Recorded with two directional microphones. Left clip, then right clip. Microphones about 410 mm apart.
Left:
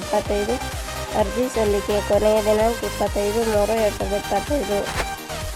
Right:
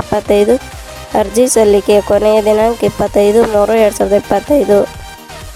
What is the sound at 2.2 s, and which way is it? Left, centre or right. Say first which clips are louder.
Speech: right 8 dB; right.